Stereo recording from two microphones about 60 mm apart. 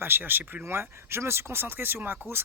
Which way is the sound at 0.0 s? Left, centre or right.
Right.